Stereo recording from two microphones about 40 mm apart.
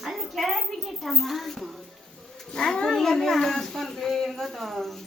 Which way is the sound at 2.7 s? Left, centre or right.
Centre.